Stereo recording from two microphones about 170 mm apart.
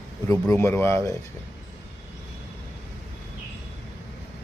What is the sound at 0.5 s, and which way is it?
Speech, 15° left (ahead or behind).